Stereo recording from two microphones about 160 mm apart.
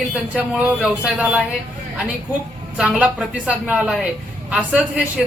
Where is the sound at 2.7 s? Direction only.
5° right (ahead or behind).